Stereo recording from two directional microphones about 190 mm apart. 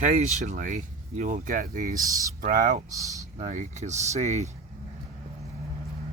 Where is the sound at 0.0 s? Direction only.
40° right (ahead or behind).